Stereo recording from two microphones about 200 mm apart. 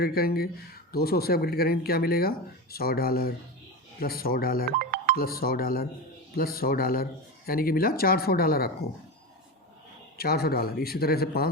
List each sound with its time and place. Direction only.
0.0 s speech: 50° left (ahead or behind)
4.8 s music: 45° right (ahead or behind)
5.1 s speech: 50° left (ahead or behind)
10.2 s speech: 50° left (ahead or behind)